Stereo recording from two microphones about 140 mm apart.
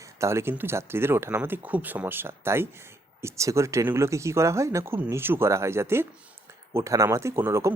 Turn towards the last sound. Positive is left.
turn(degrees=-20)  # may be behind; listen again after turning